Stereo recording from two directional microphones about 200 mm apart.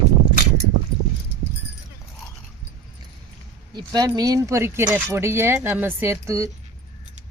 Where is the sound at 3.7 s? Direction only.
20° right (ahead or behind).